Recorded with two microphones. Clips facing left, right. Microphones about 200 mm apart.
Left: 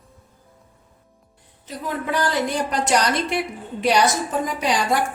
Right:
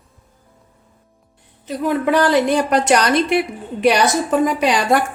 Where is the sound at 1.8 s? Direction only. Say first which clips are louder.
Right 8 dB; 70° right (ahead or behind).